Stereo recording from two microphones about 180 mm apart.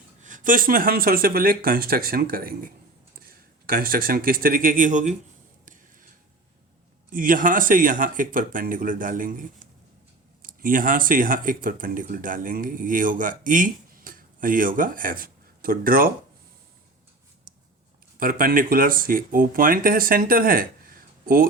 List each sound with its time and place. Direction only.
0.2 s speech: 45° right (ahead or behind)
5.6 s a sound: 45° right (ahead or behind)
7.1 s speech: 50° right (ahead or behind)
18.2 s speech: 50° right (ahead or behind)